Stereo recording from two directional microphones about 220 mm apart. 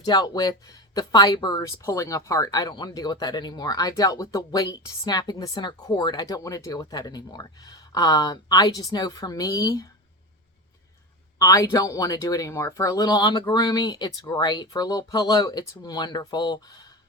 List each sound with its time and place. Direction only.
0.0 s speech: 20° left (ahead or behind)
11.3 s speech: 15° left (ahead or behind)